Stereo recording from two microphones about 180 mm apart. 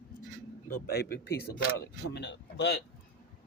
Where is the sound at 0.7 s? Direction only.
60° left (ahead or behind).